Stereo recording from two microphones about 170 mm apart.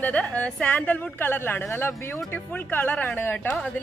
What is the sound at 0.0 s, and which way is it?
A woman's voice, 10° left (ahead or behind).